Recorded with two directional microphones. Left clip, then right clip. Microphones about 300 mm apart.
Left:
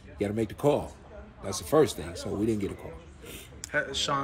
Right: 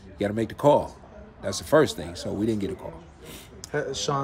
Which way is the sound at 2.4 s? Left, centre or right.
Right.